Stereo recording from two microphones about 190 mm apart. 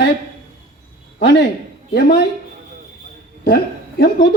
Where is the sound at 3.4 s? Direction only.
55° left (ahead or behind).